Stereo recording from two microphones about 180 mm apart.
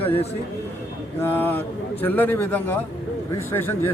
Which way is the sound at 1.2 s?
10° left (ahead or behind).